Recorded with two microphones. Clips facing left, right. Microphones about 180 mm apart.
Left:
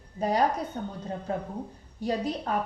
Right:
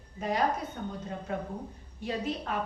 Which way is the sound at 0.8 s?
35° left (ahead or behind).